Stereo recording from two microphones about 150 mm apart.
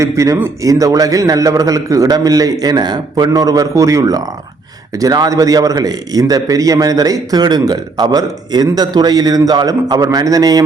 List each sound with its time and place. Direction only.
0.0 s a man's voice: 20° right (ahead or behind)